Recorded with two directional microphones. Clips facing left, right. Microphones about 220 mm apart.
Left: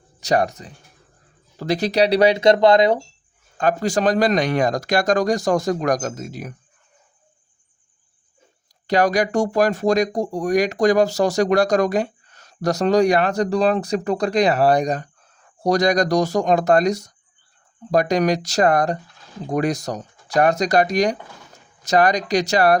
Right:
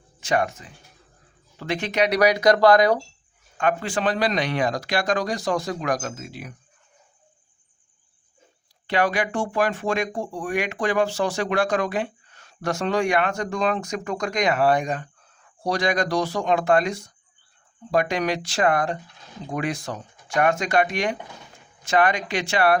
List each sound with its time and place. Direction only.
0.2 s speech: 40° left (ahead or behind)
3.6 s speech: 40° left (ahead or behind)
8.9 s speech: 40° left (ahead or behind)